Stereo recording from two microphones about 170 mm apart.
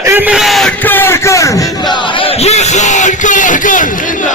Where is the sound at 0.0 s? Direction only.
10° right (ahead or behind).